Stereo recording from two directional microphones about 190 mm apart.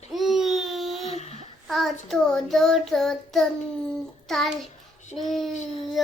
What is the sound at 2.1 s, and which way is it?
Child singing, centre (ahead or behind).